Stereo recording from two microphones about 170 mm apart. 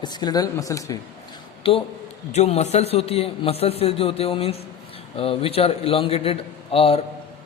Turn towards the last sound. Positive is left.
turn(degrees=35)  # may be behind; listen again after turning